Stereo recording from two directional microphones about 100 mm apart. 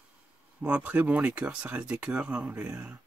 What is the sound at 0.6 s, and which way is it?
Speech, 15° right (ahead or behind).